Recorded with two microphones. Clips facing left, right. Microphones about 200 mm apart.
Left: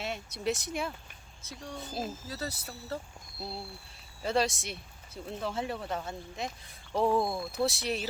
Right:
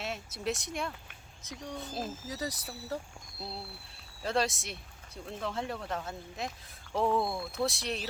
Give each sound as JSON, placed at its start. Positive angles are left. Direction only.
{"t": 0.0, "sound": "speech", "side_deg": 0}
{"t": 1.4, "sound": "a child's voice", "side_deg": -15}
{"t": 1.7, "sound": "speech", "side_deg": 0}
{"t": 2.2, "sound": "speech", "side_deg": -15}
{"t": 3.4, "sound": "speech", "side_deg": 0}
{"t": 7.2, "sound": "speech", "side_deg": 15}
{"t": 7.5, "sound": "speech", "side_deg": 0}